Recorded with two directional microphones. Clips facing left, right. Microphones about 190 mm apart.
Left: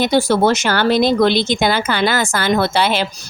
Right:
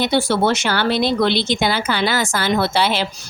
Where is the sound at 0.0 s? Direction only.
40° left (ahead or behind).